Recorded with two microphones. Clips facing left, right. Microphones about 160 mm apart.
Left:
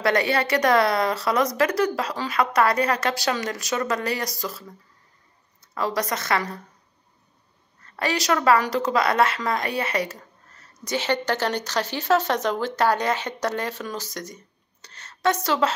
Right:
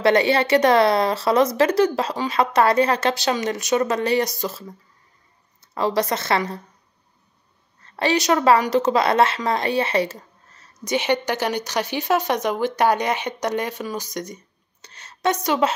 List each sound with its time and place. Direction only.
0.0 s speech: 25° right (ahead or behind)
7.8 s speech: 25° right (ahead or behind)
10.8 s speech: 15° right (ahead or behind)